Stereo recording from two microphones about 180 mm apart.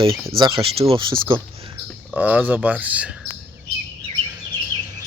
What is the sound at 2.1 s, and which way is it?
Speech, 10° right (ahead or behind).